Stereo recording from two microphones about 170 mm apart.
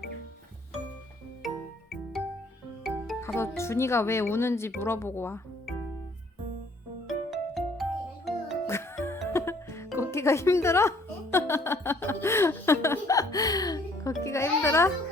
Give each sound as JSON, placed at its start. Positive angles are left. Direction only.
{"t": 1.4, "sound": "music", "side_deg": 0}
{"t": 3.2, "sound": "music", "side_deg": 15}
{"t": 3.6, "sound": "speech", "side_deg": 15}
{"t": 7.1, "sound": "music", "side_deg": 0}
{"t": 8.6, "sound": "music", "side_deg": 15}
{"t": 9.3, "sound": "speech", "side_deg": 15}